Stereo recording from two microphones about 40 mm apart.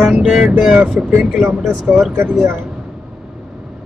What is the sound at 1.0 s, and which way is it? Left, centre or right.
Speech, right.